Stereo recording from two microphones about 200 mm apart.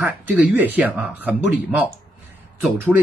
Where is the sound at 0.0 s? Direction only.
10° right (ahead or behind).